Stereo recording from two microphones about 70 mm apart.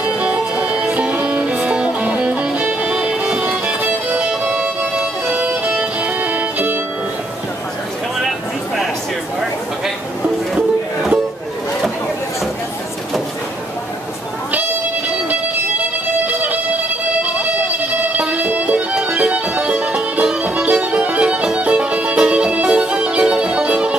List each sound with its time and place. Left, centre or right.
0.2 s music: right
8.2 s a sound: centre
10.5 s music: centre
16.3 s music: right